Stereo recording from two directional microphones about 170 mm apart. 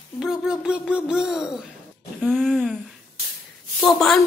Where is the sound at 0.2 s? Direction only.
5° right (ahead or behind).